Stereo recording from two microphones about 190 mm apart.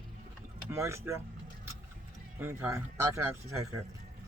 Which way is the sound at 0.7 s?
15° right (ahead or behind).